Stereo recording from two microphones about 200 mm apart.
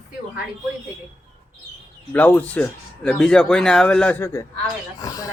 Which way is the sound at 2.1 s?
10° left (ahead or behind).